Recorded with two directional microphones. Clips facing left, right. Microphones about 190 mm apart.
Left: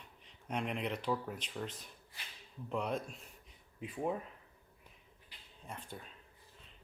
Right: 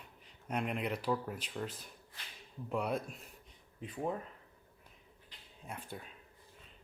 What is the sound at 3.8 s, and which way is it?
Cutlery, 5° left (ahead or behind).